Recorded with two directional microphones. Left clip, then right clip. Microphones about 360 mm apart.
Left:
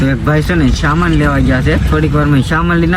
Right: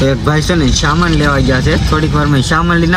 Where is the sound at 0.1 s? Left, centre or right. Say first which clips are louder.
Right 1 dB; centre.